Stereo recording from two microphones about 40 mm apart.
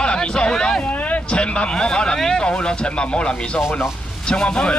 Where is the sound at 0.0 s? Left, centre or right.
Left.